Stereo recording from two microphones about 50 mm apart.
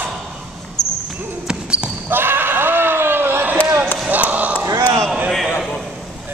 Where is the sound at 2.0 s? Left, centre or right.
Right.